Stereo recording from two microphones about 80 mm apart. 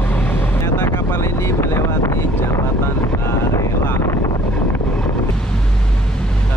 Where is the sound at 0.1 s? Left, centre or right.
Left.